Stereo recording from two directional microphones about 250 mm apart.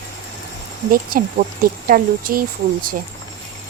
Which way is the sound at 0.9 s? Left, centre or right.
Right.